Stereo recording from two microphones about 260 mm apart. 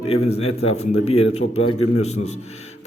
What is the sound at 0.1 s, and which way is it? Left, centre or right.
A man's voice, left.